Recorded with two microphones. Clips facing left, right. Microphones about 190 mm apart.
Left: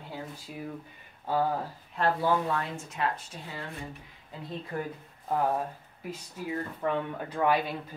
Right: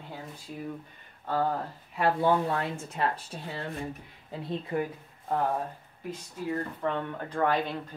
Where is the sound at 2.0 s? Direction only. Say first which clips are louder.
Right 1 dB; 15° right (ahead or behind).